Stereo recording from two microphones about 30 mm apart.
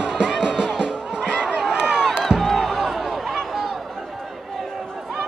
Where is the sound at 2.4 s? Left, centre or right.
Centre.